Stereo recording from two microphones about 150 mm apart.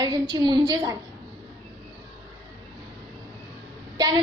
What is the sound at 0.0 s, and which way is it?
Speech, 25° right (ahead or behind).